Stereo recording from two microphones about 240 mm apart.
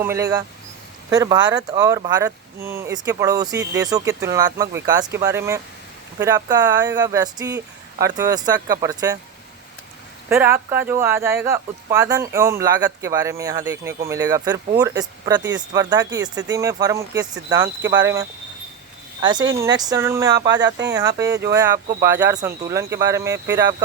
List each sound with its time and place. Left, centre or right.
0.0 s speech: centre
10.2 s speech: centre